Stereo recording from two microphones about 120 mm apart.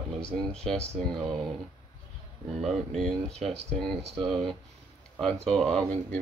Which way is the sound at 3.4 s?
Centre (ahead or behind).